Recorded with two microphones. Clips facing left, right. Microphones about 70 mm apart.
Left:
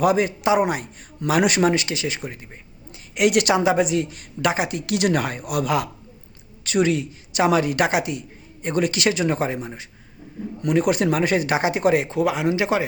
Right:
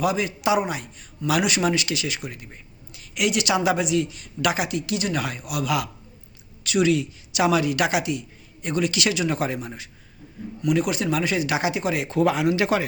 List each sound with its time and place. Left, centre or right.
0.0 s speech: left
0.6 s speech: left
3.2 s speech: left
3.5 s speech: left
4.9 s speech: left
5.2 s speech: left
10.6 s speech: left
12.2 s a man's voice: centre